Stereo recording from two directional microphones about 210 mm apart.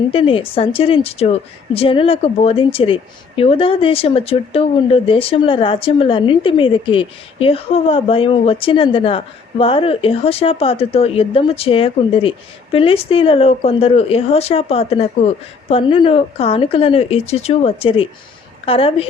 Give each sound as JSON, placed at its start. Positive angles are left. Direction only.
{"t": 0.1, "sound": "a woman's voice", "side_deg": 25}